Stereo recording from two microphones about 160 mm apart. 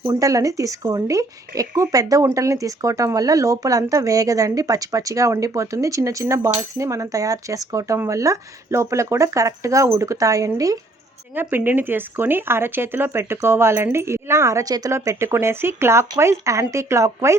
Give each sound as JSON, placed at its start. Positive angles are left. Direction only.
{"t": 0.0, "sound": "speech", "side_deg": -20}